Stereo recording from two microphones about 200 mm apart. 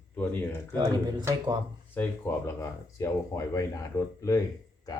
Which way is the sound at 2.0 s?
15° left (ahead or behind).